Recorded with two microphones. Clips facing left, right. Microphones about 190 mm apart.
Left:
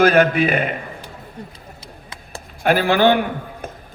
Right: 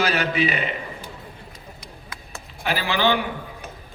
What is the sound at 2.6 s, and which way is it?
A man's voice, 50° left (ahead or behind).